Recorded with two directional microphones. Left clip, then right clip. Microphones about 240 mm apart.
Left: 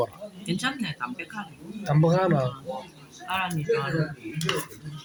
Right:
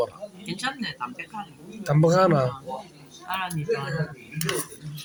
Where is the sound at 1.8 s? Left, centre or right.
Centre.